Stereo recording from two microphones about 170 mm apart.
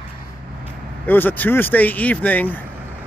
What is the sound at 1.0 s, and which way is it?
Speech, 10° left (ahead or behind).